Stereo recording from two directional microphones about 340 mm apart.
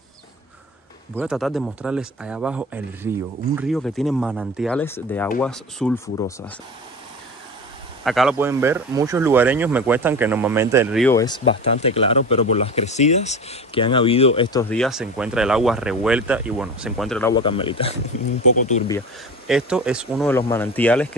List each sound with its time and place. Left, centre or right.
1.1 s speech: centre
8.0 s speech: centre
17.4 s speech: centre
18.9 s speech: centre